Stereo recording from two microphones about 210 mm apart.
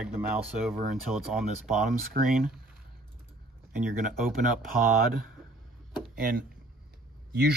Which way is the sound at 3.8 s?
40° right (ahead or behind).